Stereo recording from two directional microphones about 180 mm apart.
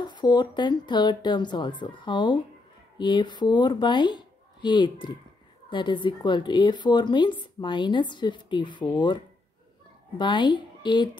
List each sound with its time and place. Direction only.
0.0 s a woman's voice: 25° left (ahead or behind)
10.1 s a woman's voice: 25° left (ahead or behind)